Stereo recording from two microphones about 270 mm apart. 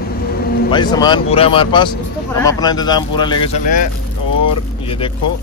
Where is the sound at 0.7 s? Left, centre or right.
Centre.